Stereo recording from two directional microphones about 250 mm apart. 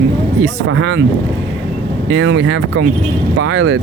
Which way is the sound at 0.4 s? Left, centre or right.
Right.